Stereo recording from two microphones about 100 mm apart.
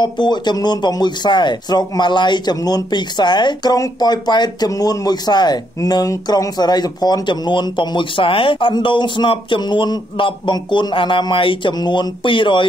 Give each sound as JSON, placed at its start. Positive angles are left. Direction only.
{"t": 0.0, "sound": "speech", "side_deg": 50}